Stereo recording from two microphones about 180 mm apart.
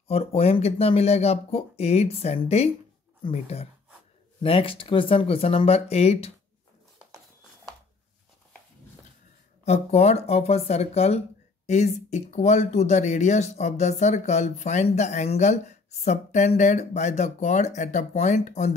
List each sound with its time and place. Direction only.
0.1 s speech: 35° left (ahead or behind)
9.7 s speech: 35° left (ahead or behind)